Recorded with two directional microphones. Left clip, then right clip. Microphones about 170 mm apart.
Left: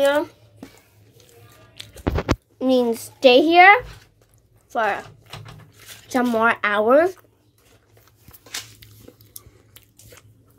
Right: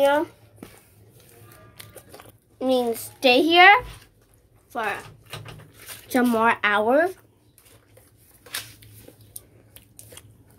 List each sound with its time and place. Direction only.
0.0 s a sound: 20° right (ahead or behind)
1.8 s music: 25° right (ahead or behind)
2.6 s a woman's voice: 10° left (ahead or behind)
4.6 s speech: 20° left (ahead or behind)
6.0 s a woman's voice: 10° left (ahead or behind)
6.9 s a woman's voice: 20° left (ahead or behind)
10.1 s biting: 15° right (ahead or behind)